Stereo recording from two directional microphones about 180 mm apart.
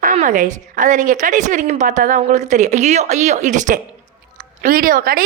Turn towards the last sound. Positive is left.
turn(degrees=-55)  # may be behind; listen again after turning